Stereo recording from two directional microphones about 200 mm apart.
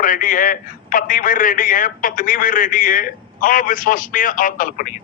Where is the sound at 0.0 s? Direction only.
40° left (ahead or behind).